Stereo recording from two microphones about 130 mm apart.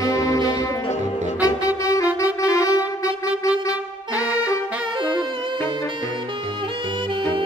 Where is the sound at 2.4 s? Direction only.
25° left (ahead or behind).